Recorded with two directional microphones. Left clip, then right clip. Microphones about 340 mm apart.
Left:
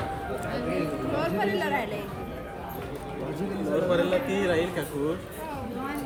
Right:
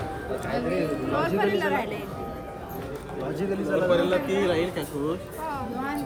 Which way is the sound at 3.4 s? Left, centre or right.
Centre.